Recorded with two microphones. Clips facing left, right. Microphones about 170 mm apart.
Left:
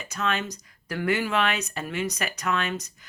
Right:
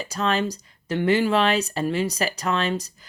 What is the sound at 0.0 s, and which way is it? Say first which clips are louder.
Speech: right 5 dB; 35° right (ahead or behind).